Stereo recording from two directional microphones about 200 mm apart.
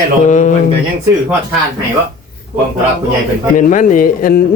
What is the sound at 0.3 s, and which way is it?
Speech, 40° left (ahead or behind).